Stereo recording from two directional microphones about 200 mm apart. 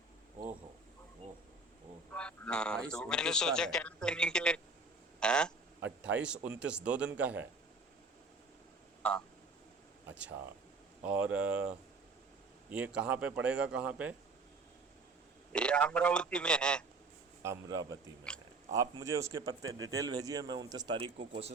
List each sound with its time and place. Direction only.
2.1 s a man's voice: 5° left (ahead or behind)
5.2 s a sound: 5° left (ahead or behind)
6.0 s a man's voice: 5° right (ahead or behind)
10.1 s speech: 5° right (ahead or behind)
12.7 s a man's voice: 5° right (ahead or behind)
15.5 s a man's voice: 5° left (ahead or behind)
17.4 s a man's voice: 15° right (ahead or behind)